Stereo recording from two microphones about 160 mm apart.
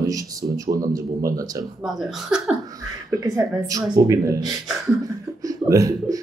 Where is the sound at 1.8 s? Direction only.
Centre (ahead or behind).